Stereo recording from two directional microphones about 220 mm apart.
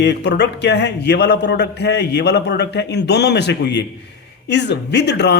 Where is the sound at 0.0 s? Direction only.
50° left (ahead or behind).